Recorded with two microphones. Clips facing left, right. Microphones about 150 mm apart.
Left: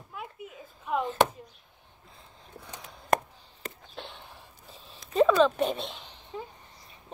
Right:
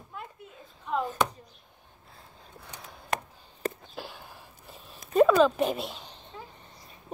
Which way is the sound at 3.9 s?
5° right (ahead or behind).